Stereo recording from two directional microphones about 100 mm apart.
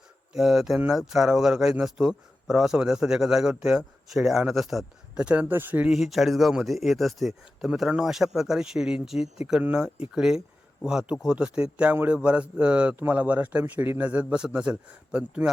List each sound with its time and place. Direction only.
0.3 s a man's voice: 5° right (ahead or behind)
5.9 s a man's voice: centre (ahead or behind)